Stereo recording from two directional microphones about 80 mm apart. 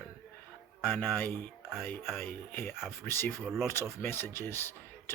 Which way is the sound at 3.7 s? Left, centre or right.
Left.